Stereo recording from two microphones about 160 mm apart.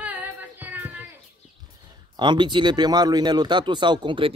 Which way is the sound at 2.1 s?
30° right (ahead or behind).